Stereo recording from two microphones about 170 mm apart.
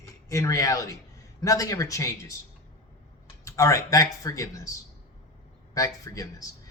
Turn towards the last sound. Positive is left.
turn(degrees=20)  # may be behind; listen again after turning